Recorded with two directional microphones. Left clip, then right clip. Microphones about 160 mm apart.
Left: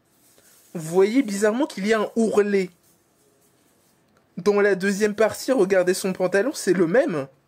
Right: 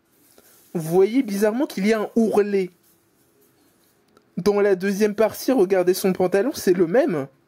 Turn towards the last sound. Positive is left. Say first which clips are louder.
# right 1 dB
turn(degrees=-25)  # may be behind; listen again after turning